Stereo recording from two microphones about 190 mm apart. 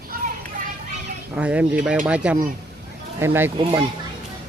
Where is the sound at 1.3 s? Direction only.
5° right (ahead or behind).